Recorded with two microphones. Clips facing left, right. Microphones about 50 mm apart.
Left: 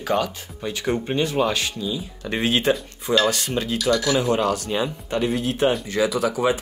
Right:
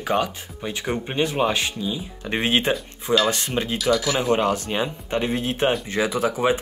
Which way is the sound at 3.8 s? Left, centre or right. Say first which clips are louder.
Left 1 dB; centre.